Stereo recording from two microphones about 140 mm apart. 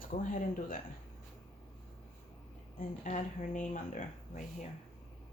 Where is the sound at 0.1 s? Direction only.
70° left (ahead or behind).